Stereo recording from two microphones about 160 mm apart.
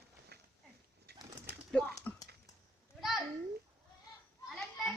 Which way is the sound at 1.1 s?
90° right.